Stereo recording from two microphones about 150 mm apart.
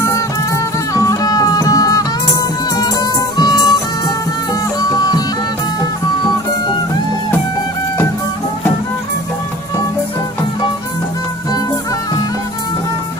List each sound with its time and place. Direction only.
0.9 s music: 25° left (ahead or behind)
4.8 s music: 25° left (ahead or behind)